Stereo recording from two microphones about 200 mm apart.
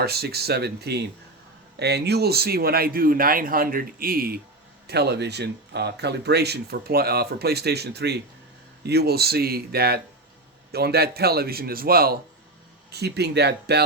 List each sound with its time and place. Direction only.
0.0 s speech: 50° right (ahead or behind)